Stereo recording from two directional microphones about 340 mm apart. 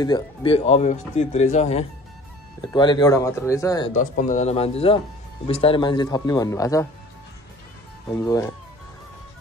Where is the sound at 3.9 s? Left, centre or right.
Left.